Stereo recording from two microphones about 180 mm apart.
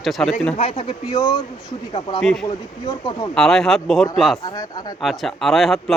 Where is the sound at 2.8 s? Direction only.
25° left (ahead or behind).